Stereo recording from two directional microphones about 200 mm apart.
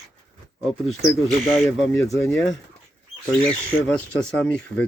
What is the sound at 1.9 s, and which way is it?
Speech, 15° left (ahead or behind).